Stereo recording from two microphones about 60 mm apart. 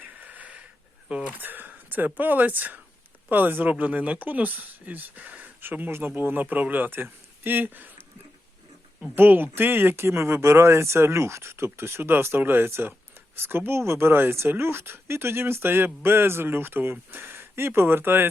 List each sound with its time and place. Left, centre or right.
0.0 s wheeze: right
1.0 s a sound: centre
1.3 s speech: right
9.1 s speech: right